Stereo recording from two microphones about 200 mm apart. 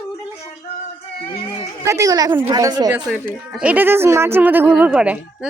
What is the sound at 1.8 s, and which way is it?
Speech, 15° right (ahead or behind).